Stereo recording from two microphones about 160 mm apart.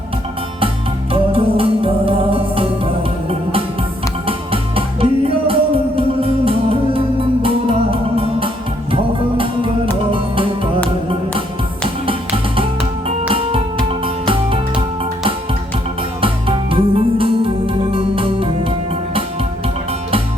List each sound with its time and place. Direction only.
1.1 s music: 35° right (ahead or behind)
4.3 s music: 35° right (ahead or behind)
13.1 s music: 35° right (ahead or behind)